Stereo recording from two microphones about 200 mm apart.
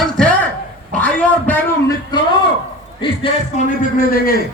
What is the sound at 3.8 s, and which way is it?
Speech, 45° left (ahead or behind).